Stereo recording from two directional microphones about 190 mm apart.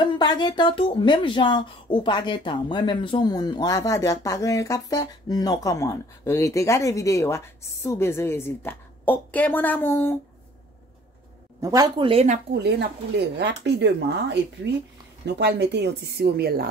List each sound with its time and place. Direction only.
0.0 s speech: 25° left (ahead or behind)
11.6 s speech: 20° right (ahead or behind)
12.1 s speech: 35° right (ahead or behind)
12.5 s speech: 60° right (ahead or behind)